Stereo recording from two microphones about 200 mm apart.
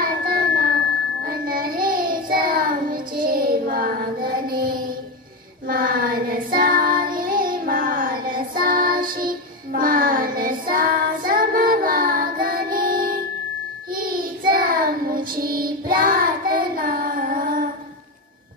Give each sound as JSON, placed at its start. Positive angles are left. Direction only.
{"t": 0.0, "sound": "child singing", "side_deg": -45}